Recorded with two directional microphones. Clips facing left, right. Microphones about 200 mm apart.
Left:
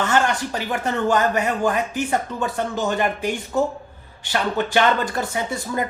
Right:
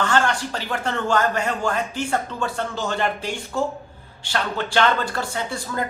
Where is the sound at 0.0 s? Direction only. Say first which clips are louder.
Left 1 dB; 20° left (ahead or behind).